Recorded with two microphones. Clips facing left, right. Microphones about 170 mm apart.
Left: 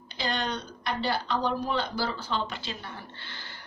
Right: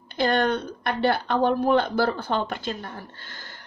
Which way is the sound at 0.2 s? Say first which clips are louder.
Right 9 dB; 55° right (ahead or behind).